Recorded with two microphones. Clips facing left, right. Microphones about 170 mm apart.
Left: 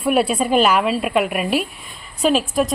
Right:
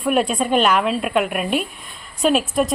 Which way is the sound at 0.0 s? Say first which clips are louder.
Left 1 dB; 5° left (ahead or behind).